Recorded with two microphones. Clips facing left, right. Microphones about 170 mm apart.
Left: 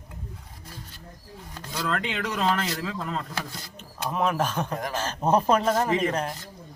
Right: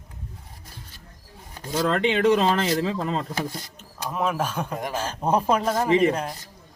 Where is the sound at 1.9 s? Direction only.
30° right (ahead or behind).